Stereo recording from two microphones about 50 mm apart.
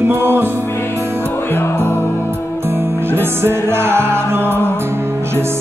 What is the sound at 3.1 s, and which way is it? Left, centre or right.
Music, right.